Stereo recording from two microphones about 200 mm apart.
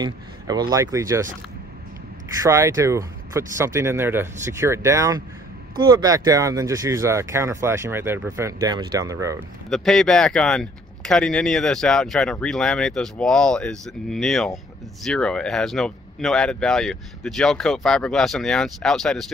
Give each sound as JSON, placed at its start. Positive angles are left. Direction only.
{"t": 0.0, "sound": "speech", "side_deg": -20}
{"t": 2.4, "sound": "speech", "side_deg": -15}
{"t": 9.7, "sound": "speech", "side_deg": 5}